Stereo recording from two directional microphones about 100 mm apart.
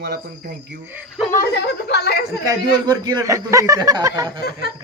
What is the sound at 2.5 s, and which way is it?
Speech, 45° right (ahead or behind).